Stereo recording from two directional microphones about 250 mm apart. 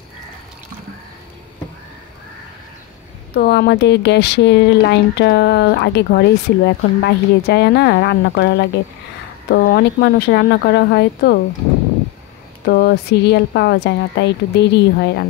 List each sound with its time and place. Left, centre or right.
3.3 s a woman's voice: left
12.6 s a woman's voice: left